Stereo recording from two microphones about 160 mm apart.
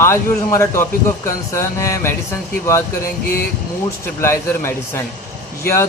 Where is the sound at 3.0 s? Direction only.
65° left (ahead or behind).